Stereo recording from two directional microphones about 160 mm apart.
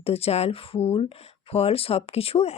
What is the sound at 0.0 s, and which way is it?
A woman's voice, 40° left (ahead or behind).